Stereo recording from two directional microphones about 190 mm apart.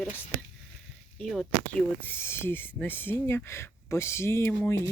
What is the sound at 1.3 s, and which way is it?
Speech, 5° left (ahead or behind).